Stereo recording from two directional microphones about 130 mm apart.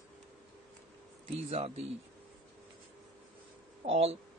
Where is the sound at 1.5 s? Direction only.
55° right (ahead or behind).